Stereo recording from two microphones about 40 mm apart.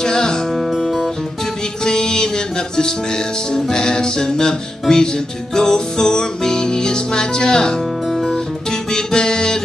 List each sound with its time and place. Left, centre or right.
0.0 s music: centre
0.6 s guitar: centre
1.9 s music: centre
8.1 s music: centre
8.9 s music: centre